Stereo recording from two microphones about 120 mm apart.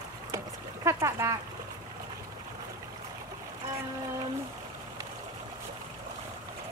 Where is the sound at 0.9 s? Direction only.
25° right (ahead or behind).